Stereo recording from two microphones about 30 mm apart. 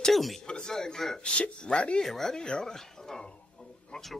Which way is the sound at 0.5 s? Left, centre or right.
Left.